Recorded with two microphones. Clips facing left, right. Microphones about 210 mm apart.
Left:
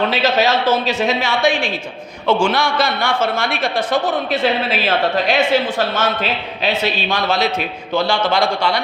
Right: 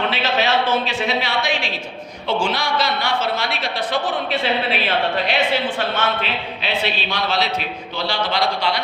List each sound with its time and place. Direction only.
0.1 s a woman's voice: 40° left (ahead or behind)